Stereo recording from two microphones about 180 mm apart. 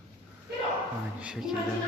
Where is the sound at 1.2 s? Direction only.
5° right (ahead or behind).